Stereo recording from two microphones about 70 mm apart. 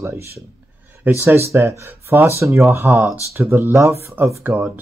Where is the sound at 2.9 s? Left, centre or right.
Right.